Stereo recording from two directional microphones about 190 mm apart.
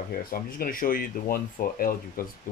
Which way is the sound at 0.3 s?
50° left (ahead or behind).